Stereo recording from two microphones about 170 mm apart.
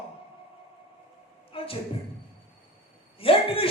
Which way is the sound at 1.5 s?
30° left (ahead or behind).